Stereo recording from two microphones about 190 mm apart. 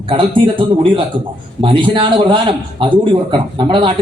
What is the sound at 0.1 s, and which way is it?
A man's voice, 25° right (ahead or behind).